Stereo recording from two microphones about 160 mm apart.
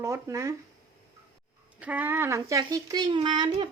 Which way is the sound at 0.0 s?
20° right (ahead or behind).